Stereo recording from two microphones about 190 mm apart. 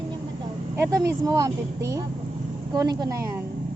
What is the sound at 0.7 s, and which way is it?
Speech, 15° right (ahead or behind).